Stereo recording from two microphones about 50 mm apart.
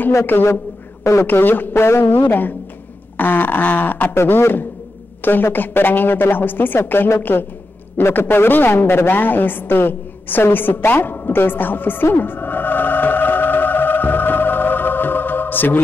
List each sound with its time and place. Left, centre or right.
0.3 s a woman's voice: left
1.7 s a woman's voice: left
4.1 s a woman's voice: left
10.9 s music: left